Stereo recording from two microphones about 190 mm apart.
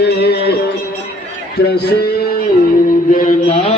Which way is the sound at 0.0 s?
60° left (ahead or behind).